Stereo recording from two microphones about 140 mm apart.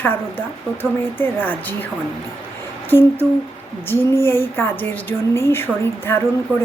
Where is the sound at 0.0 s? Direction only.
15° left (ahead or behind).